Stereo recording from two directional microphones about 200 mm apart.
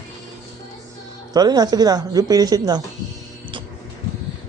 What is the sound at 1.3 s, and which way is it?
Speech, 20° right (ahead or behind).